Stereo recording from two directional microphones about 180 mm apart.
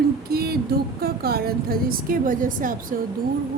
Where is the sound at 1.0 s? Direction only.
60° right (ahead or behind).